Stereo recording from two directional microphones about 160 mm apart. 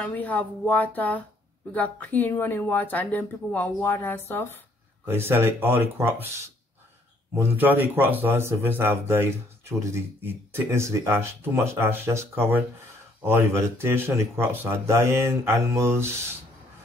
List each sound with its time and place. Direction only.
0.0 s speech: 10° left (ahead or behind)
5.0 s speech: 15° right (ahead or behind)